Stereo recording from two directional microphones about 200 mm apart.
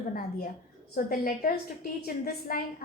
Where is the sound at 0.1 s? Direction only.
45° left (ahead or behind).